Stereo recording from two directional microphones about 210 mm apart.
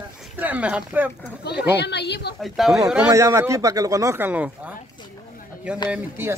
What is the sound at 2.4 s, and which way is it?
Speech, centre (ahead or behind).